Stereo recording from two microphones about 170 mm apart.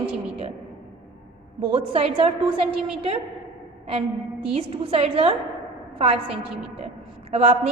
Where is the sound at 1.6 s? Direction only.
35° right (ahead or behind).